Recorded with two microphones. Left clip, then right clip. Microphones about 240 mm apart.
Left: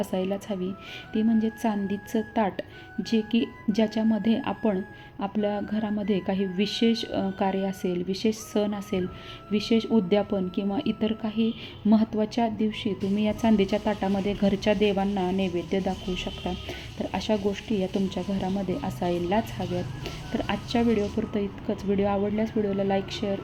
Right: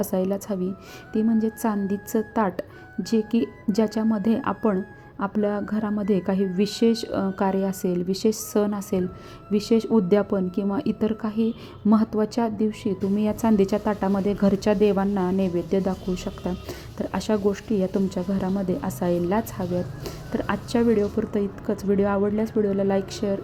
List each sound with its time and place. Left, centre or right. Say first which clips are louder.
0.0 s a woman's voice: right 3 dB; centre